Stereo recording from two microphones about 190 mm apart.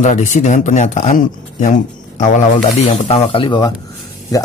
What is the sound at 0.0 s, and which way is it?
Speech, 40° left (ahead or behind).